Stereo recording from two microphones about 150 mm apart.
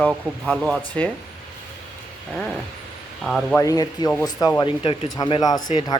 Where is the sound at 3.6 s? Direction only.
25° left (ahead or behind).